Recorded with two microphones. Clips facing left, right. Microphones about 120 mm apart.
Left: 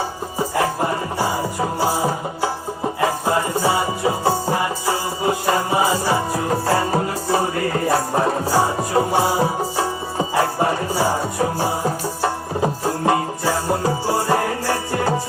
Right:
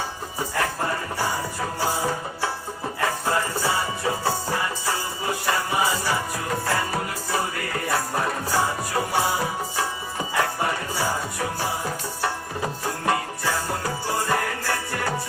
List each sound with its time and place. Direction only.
0.3 s music: 20° left (ahead or behind)